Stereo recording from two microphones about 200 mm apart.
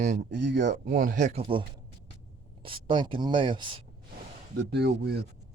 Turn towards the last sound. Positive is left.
turn(degrees=-55)  # may be behind; listen again after turning